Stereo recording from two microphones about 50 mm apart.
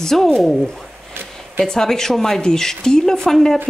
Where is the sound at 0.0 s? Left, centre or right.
Centre.